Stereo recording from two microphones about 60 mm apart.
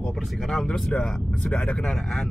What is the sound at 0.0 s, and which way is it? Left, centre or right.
Speech, centre.